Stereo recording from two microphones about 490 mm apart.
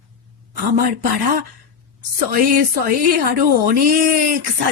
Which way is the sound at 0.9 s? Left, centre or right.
Right.